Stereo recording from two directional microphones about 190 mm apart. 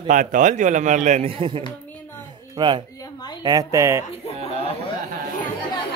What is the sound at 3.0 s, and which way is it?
Speech, 20° left (ahead or behind).